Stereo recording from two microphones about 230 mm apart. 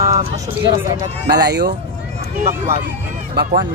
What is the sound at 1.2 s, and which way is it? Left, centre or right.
Speech, right.